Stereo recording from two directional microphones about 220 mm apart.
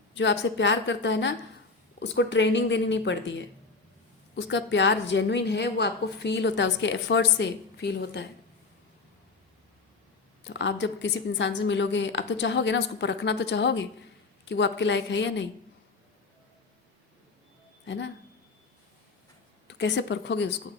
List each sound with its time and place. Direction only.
0.1 s a woman's voice: 55° left (ahead or behind)
10.4 s a woman's voice: 55° left (ahead or behind)
17.8 s speech: 55° left (ahead or behind)
19.6 s speech: 55° left (ahead or behind)